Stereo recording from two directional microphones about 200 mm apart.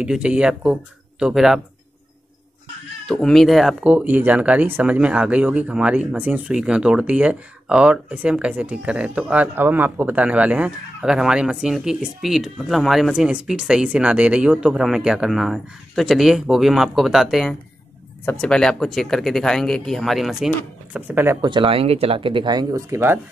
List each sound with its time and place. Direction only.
0.0 s speech: 5° right (ahead or behind)
3.1 s speech: centre (ahead or behind)
20.9 s speech: 10° right (ahead or behind)
21.4 s speech: 25° right (ahead or behind)